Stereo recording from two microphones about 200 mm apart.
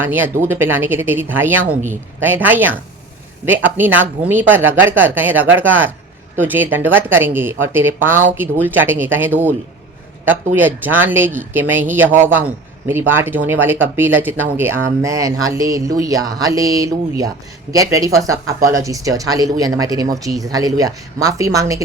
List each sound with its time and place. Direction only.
0.0 s speech: 10° right (ahead or behind)